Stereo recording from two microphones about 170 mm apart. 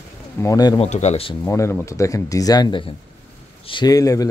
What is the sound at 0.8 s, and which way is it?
Speech, 40° left (ahead or behind).